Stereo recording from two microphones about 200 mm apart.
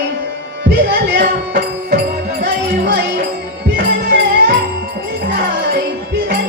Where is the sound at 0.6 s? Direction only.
60° right (ahead or behind).